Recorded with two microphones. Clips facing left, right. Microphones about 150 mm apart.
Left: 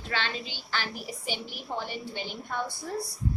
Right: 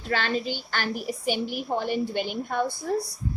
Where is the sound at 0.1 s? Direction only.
45° right (ahead or behind).